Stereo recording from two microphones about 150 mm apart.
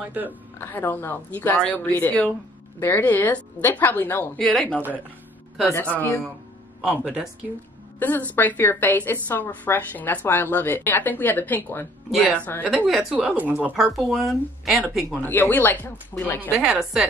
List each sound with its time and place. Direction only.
0.0 s speech: 10° right (ahead or behind)
0.6 s a woman's voice: 15° left (ahead or behind)
6.8 s speech: 10° right (ahead or behind)
8.0 s a woman's voice: 10° left (ahead or behind)
12.6 s speech: 5° right (ahead or behind)
15.2 s a woman's voice: 15° left (ahead or behind)
16.3 s speech: 10° right (ahead or behind)